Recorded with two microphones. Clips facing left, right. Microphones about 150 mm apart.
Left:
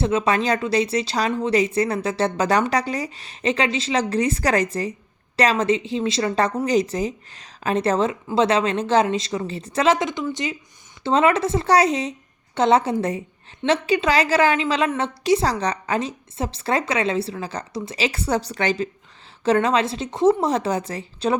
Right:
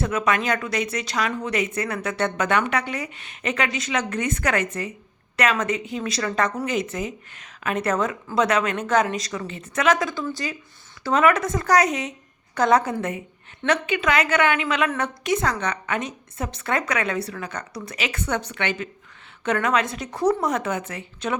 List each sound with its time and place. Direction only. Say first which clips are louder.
0.0 s a woman's voice: left 3 dB; 25° left (ahead or behind)